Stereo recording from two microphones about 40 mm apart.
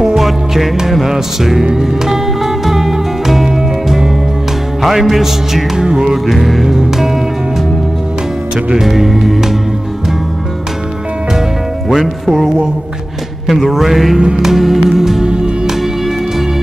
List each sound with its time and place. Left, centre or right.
0.0 s music: centre
6.2 s music: centre
8.8 s music: centre
11.9 s music: centre
13.5 s music: centre
15.2 s music: right